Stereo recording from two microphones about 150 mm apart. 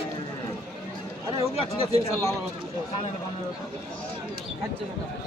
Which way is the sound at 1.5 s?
40° right (ahead or behind).